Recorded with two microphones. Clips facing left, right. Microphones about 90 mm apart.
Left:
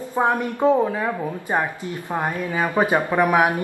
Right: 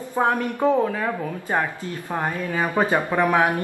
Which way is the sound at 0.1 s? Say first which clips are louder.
Left 1 dB; 15° left (ahead or behind).